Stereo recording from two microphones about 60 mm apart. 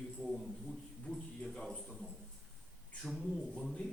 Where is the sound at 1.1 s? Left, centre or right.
Centre.